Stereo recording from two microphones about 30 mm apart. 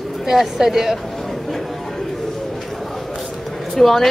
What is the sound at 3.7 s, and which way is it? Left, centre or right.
Speech, centre.